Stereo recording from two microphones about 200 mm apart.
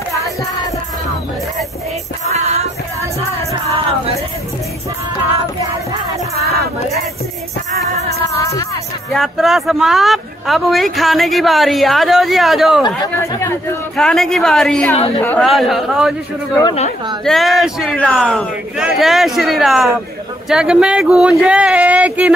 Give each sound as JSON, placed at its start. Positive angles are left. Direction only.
{"t": 2.3, "sound": "music", "side_deg": -35}
{"t": 7.9, "sound": "music", "side_deg": 15}
{"t": 9.1, "sound": "speech", "side_deg": 0}
{"t": 12.8, "sound": "speech", "side_deg": 20}
{"t": 13.9, "sound": "speech", "side_deg": 0}
{"t": 17.2, "sound": "speech", "side_deg": 0}